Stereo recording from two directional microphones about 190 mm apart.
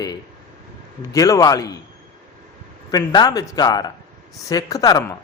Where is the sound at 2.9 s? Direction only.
20° left (ahead or behind).